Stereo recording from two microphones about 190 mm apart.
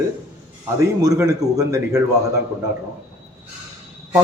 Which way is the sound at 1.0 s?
15° right (ahead or behind).